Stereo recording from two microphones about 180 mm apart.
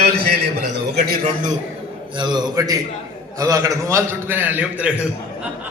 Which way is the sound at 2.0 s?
25° right (ahead or behind).